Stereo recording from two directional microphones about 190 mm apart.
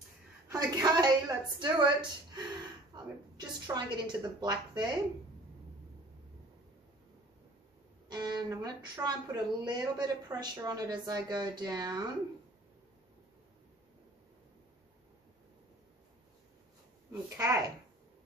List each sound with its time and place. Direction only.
0.5 s a sound: 20° right (ahead or behind)
1.6 s a woman's voice: 25° right (ahead or behind)
8.1 s a woman's voice: 20° right (ahead or behind)
17.1 s speech: 15° right (ahead or behind)